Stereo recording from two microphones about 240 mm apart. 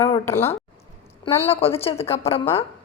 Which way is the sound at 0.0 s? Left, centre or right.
Centre.